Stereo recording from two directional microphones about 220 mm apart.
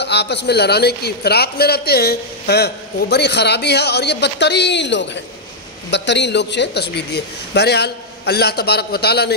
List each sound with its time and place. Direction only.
0.0 s a man's voice: 50° left (ahead or behind)